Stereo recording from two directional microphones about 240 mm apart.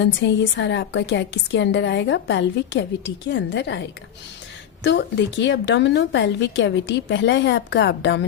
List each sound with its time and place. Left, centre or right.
0.0 s a woman's voice: left